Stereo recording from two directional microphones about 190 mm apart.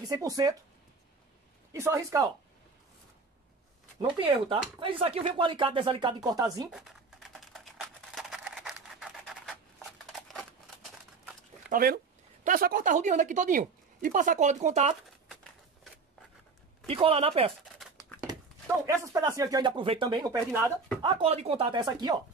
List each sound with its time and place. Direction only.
0.0 s speech: 20° right (ahead or behind)
1.7 s speech: 15° right (ahead or behind)
4.0 s speech: 30° right (ahead or behind)
6.7 s typing: centre (ahead or behind)
10.1 s a sound: centre (ahead or behind)
11.7 s speech: 55° right (ahead or behind); by 15.0 s 35° right (ahead or behind)
16.8 s speech: 30° right (ahead or behind)
18.2 s speech: 15° right (ahead or behind)
21.1 s speech: 30° right (ahead or behind)